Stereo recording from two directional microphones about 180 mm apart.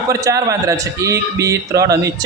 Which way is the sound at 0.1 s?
20° right (ahead or behind).